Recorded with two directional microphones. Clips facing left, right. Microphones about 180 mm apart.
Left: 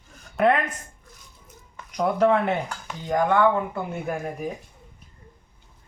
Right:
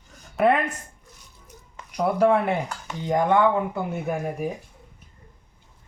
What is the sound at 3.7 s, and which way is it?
Speech, 5° right (ahead or behind).